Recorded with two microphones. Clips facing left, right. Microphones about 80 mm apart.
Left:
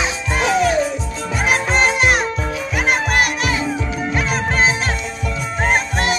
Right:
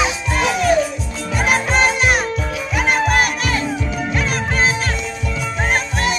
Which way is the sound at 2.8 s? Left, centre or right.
Centre.